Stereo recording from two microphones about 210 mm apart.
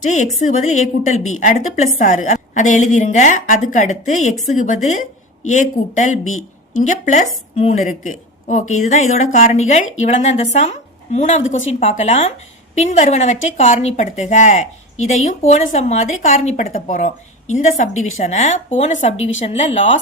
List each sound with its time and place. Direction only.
0.0 s a woman's voice: 35° left (ahead or behind)